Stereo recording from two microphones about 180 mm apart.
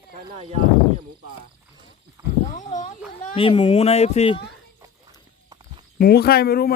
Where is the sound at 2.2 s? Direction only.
15° right (ahead or behind).